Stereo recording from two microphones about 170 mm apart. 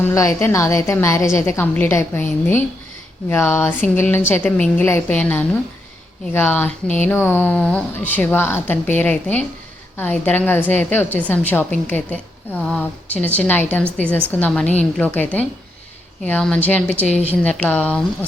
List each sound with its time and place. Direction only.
0.0 s a woman's voice: 15° left (ahead or behind)